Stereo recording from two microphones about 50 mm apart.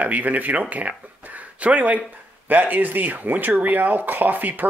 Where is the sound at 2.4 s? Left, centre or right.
Right.